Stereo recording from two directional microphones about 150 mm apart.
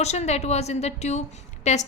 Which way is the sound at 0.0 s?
45° left (ahead or behind).